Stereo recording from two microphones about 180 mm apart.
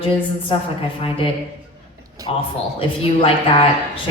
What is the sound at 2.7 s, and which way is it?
Speech, 30° left (ahead or behind).